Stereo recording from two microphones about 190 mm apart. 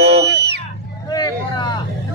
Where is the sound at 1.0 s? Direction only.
20° left (ahead or behind).